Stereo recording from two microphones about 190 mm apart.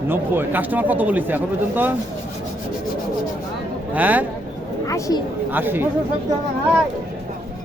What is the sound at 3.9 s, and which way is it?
Speech, 10° right (ahead or behind).